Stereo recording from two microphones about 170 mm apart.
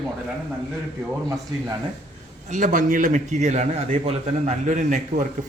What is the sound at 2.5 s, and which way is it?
A man's voice, 45° right (ahead or behind).